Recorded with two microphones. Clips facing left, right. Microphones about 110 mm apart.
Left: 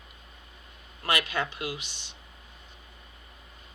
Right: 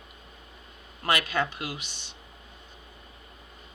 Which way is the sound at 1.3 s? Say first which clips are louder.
Right 2 dB; 45° right (ahead or behind).